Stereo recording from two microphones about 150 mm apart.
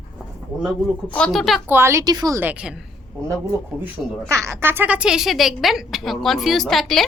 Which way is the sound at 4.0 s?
5° left (ahead or behind).